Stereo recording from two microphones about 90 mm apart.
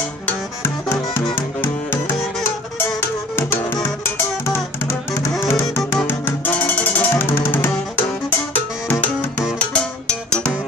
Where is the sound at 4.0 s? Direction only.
30° left (ahead or behind).